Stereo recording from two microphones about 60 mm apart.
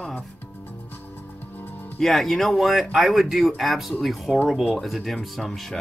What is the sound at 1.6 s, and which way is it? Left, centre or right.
Music, left.